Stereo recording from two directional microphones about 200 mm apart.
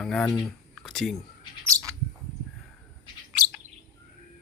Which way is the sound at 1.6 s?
15° right (ahead or behind).